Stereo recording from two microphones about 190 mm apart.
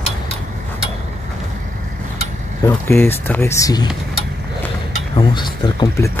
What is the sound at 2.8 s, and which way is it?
Speech, 10° left (ahead or behind).